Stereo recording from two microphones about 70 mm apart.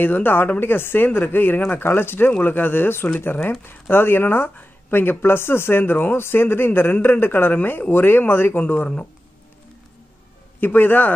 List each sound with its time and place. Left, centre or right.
0.0 s speech: left
10.6 s speech: left